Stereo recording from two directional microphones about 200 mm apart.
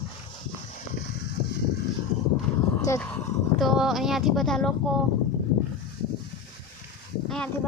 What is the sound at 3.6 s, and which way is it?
Speech, centre (ahead or behind).